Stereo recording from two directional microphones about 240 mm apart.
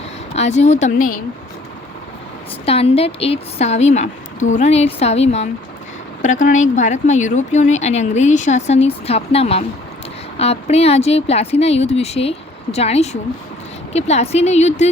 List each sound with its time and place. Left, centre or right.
0.3 s speech: left
2.6 s speech: left